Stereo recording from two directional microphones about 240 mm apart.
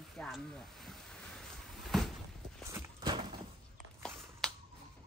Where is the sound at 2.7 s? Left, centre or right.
Centre.